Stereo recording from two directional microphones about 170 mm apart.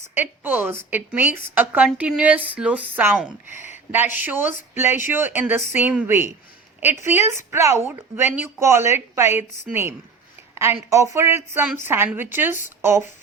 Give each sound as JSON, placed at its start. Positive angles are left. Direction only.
{"t": 0.1, "sound": "a woman's voice", "side_deg": -10}